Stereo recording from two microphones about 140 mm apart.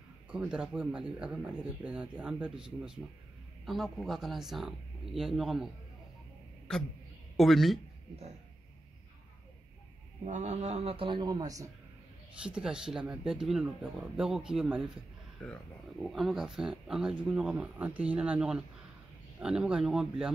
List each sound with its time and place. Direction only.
0.3 s speech: 10° right (ahead or behind)
7.3 s speech: centre (ahead or behind)
10.2 s a man's voice: 55° right (ahead or behind); by 11.7 s 25° right (ahead or behind)
12.4 s speech: 5° right (ahead or behind)